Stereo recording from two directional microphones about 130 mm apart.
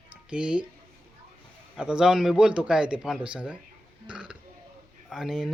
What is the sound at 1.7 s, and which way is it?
A man's voice, 5° right (ahead or behind).